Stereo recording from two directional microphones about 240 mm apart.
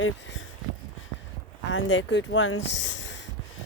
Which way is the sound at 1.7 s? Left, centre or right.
Left.